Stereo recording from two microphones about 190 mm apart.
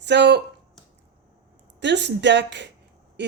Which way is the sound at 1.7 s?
65° right (ahead or behind).